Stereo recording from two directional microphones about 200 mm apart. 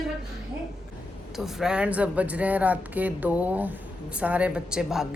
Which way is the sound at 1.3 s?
Centre (ahead or behind).